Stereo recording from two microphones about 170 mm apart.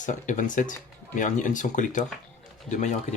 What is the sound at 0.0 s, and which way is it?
Speech, 45° left (ahead or behind).